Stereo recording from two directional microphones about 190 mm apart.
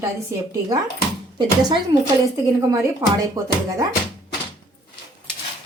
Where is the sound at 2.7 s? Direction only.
15° right (ahead or behind).